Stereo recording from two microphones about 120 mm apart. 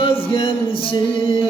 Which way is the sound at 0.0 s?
45° left (ahead or behind).